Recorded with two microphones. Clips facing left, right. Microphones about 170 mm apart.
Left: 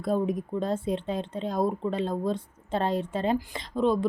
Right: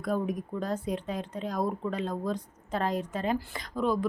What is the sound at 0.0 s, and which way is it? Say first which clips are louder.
Speech: left 3 dB; 25° left (ahead or behind).